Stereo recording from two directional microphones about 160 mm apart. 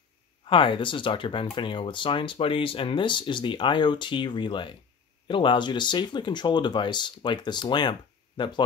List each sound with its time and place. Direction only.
0.5 s speech: 30° left (ahead or behind)